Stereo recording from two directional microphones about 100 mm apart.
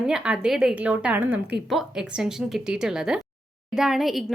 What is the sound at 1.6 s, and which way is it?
A woman's voice, 5° right (ahead or behind).